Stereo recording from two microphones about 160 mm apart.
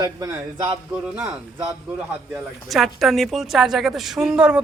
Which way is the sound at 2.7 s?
Centre (ahead or behind).